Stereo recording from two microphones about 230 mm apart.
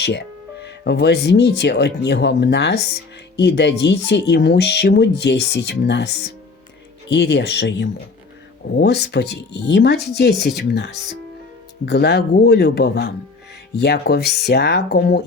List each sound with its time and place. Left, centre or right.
0.0 s speech: left